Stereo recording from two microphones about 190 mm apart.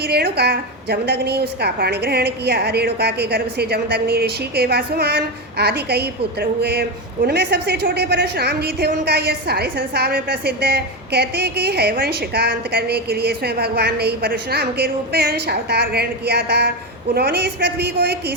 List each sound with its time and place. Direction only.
0.0 s a woman's voice: 55° right (ahead or behind)